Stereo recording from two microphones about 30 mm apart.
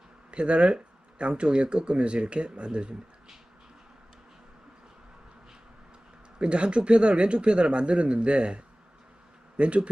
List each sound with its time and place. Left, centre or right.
0.3 s speech: right
6.4 s speech: right